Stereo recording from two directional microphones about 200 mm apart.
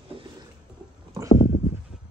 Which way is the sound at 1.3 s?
30° left (ahead or behind).